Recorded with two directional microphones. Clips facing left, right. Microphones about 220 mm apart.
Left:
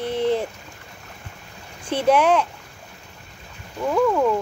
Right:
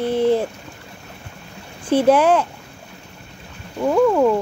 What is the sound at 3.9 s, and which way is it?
Speech, 15° right (ahead or behind).